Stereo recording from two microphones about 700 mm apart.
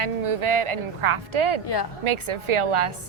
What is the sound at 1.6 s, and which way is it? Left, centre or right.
Speech, left.